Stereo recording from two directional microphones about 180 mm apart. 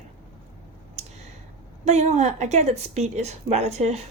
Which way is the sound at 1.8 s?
40° right (ahead or behind).